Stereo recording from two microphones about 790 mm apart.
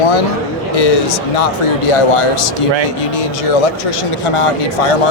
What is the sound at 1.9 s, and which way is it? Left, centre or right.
Speech, left.